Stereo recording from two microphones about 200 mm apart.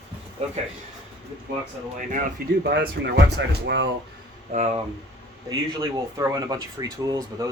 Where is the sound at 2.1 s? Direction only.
45° right (ahead or behind).